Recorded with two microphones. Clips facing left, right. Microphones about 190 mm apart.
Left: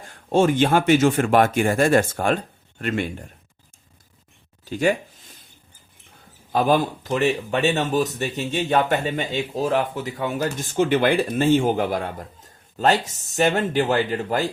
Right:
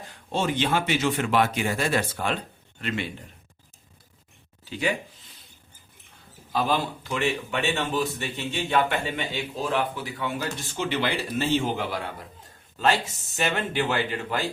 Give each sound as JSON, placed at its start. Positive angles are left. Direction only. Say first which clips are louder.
{"t": 0.1, "sound": "speech", "louder": "left 9 dB", "side_deg": 50}
{"t": 4.6, "sound": "a sound", "louder": "left 7 dB", "side_deg": 45}
{"t": 6.5, "sound": "speech", "louder": "left 6 dB", "side_deg": 50}